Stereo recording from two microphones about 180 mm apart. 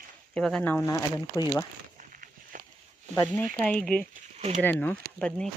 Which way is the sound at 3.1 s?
15° left (ahead or behind).